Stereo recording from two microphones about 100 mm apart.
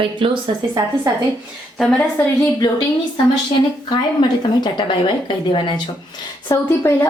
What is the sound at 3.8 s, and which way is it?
A woman's voice, 50° left (ahead or behind).